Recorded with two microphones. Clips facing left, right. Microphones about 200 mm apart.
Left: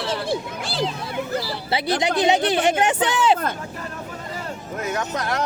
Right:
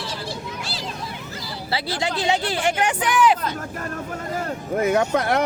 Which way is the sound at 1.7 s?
20° left (ahead or behind).